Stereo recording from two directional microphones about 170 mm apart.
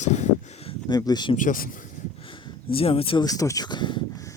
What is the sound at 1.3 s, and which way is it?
Speech, 50° left (ahead or behind).